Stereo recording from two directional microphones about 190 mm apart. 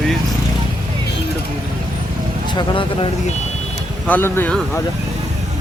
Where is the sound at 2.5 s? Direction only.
25° left (ahead or behind).